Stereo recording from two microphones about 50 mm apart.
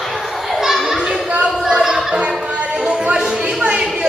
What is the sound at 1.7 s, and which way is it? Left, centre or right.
Music, centre.